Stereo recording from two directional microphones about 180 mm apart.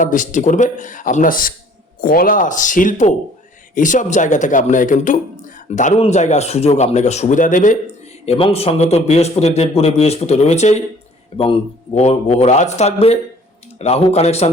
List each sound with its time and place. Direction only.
0.0 s a man's voice: 45° left (ahead or behind)
8.2 s a man's voice: 35° left (ahead or behind)